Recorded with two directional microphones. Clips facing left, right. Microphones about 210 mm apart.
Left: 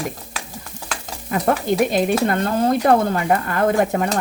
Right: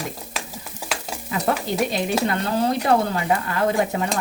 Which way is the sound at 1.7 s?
50° left (ahead or behind).